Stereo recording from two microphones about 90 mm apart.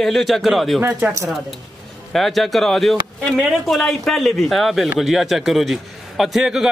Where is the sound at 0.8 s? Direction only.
25° right (ahead or behind).